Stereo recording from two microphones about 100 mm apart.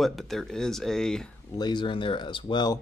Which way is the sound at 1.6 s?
50° left (ahead or behind).